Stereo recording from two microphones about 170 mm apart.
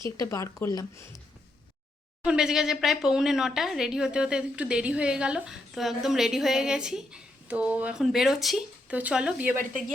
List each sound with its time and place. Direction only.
0.2 s speech: 20° left (ahead or behind)
2.2 s speech: 5° right (ahead or behind)